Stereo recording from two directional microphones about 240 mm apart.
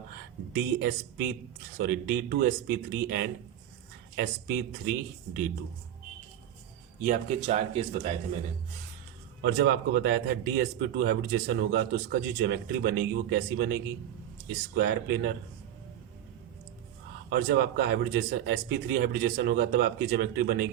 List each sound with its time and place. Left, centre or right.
0.5 s speech: right
7.0 s speech: right
9.4 s a man's voice: right
17.2 s speech: right